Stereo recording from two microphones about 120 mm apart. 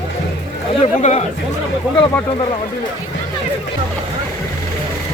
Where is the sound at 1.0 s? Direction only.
65° left (ahead or behind).